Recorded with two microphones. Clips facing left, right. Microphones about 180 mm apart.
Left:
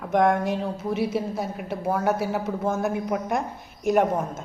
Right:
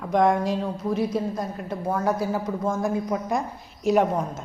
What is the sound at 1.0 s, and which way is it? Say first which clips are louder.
A woman's voice: left 1 dB; 5° left (ahead or behind).